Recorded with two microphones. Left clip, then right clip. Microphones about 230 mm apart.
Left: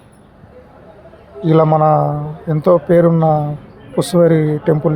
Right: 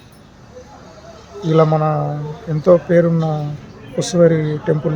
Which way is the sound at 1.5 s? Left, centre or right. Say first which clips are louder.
Left 4 dB; centre.